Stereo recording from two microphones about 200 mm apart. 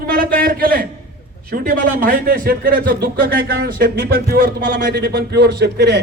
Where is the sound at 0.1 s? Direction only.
45° right (ahead or behind).